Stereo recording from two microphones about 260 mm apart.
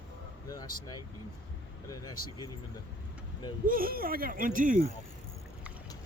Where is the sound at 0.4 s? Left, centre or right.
Centre.